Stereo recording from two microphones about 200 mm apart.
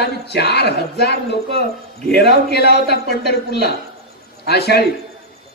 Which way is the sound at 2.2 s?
55° left (ahead or behind).